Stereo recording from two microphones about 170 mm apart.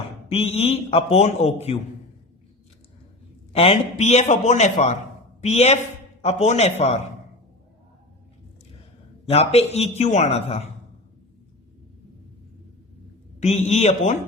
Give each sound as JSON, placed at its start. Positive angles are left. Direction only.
{"t": 0.3, "sound": "a man's voice", "side_deg": 35}
{"t": 3.5, "sound": "a man's voice", "side_deg": 35}
{"t": 9.3, "sound": "a man's voice", "side_deg": 35}
{"t": 13.4, "sound": "a man's voice", "side_deg": 40}